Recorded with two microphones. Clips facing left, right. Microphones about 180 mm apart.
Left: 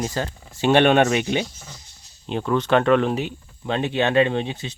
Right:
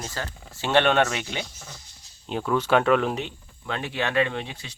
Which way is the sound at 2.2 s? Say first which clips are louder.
Left 3 dB; centre (ahead or behind).